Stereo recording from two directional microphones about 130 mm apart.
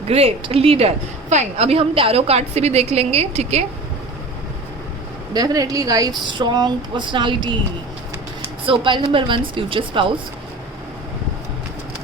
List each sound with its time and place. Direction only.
0.1 s a woman's voice: 50° right (ahead or behind)
5.3 s a woman's voice: 30° right (ahead or behind)
8.6 s a woman's voice: 40° right (ahead or behind)